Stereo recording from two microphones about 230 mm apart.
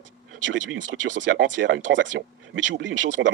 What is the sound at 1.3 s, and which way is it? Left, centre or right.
Speech, right.